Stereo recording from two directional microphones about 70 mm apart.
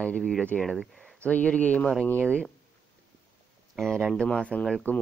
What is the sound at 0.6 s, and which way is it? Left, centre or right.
Speech, centre.